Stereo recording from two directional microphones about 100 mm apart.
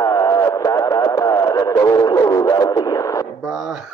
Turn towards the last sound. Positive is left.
turn(degrees=-5)  # may be behind; listen again after turning